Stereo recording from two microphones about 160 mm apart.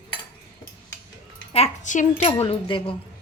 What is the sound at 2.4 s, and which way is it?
Speech, 30° left (ahead or behind).